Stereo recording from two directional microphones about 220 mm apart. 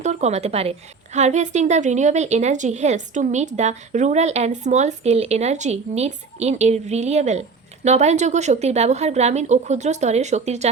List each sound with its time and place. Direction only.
0.0 s a woman's voice: 30° right (ahead or behind)